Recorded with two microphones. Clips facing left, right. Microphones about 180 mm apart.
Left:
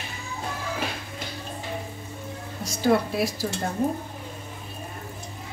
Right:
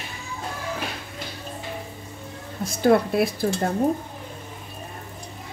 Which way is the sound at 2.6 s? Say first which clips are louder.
Right 3 dB; 55° right (ahead or behind).